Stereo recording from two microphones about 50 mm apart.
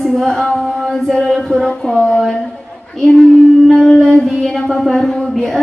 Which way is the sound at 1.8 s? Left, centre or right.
Centre.